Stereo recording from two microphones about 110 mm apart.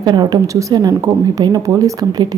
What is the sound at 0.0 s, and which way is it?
Speech, 40° right (ahead or behind).